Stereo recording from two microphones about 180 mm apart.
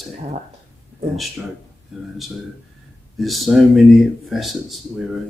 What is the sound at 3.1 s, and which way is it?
Speech, centre (ahead or behind).